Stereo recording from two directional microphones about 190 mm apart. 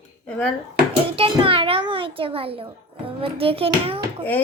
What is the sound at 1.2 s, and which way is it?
A child's voice, 30° right (ahead or behind).